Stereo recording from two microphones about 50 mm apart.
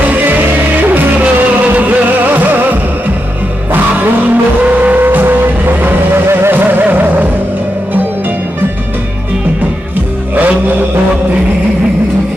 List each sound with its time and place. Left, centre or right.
1.8 s music: right
4.6 s vehicle: right
6.2 s music: right
10.3 s music: right